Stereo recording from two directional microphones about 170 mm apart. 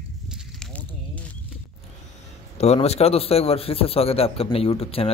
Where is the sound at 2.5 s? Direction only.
40° left (ahead or behind).